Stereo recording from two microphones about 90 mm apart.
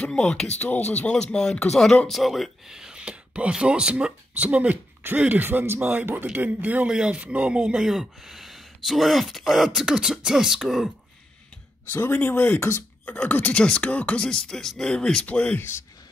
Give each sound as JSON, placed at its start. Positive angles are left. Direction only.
{"t": 0.0, "sound": "speech", "side_deg": 10}
{"t": 11.9, "sound": "speech", "side_deg": 25}
{"t": 13.1, "sound": "speech", "side_deg": 15}